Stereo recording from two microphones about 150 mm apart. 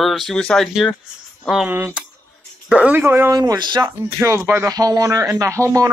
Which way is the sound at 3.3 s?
25° right (ahead or behind).